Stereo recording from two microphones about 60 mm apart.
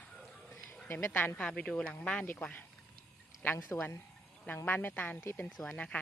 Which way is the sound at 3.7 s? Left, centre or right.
Left.